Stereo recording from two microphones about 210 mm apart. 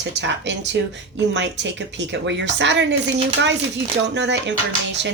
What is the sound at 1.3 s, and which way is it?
Speech, 55° right (ahead or behind).